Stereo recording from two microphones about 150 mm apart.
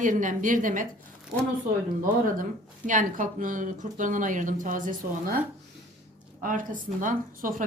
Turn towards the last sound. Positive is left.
turn(degrees=-65)  # may be behind; listen again after turning